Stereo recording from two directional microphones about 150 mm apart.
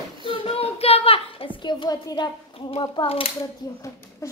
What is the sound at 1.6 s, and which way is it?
A child's voice, 30° left (ahead or behind).